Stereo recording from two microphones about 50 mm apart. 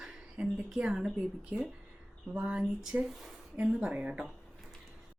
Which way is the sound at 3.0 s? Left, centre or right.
Centre.